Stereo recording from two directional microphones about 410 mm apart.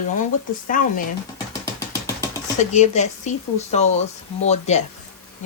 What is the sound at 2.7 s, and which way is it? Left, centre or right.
Speech, centre.